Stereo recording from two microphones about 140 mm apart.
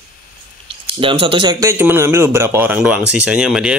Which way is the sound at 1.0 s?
40° right (ahead or behind).